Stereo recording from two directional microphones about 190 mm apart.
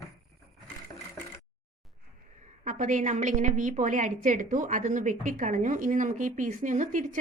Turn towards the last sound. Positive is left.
turn(degrees=-40)  # may be behind; listen again after turning